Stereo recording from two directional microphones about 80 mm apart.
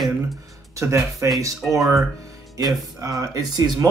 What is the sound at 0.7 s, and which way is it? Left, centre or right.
Speech, right.